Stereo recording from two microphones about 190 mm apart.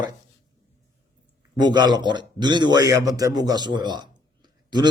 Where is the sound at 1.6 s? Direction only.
20° right (ahead or behind).